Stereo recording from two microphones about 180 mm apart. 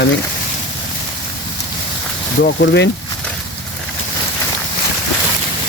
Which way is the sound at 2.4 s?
55° left (ahead or behind).